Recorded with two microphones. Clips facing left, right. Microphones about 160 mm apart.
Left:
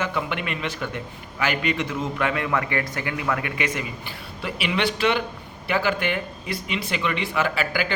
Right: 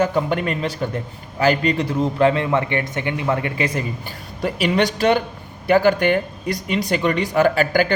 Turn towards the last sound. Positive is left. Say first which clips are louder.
# right 8 dB
turn(degrees=-40)  # may be behind; listen again after turning